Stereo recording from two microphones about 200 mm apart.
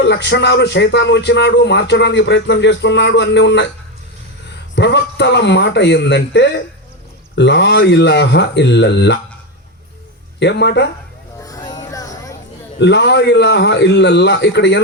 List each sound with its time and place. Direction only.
0.0 s speech: 60° left (ahead or behind)
4.7 s speech: 60° left (ahead or behind)
10.4 s speech: 60° left (ahead or behind)
11.3 s music: 15° left (ahead or behind)
12.8 s speech: 60° left (ahead or behind)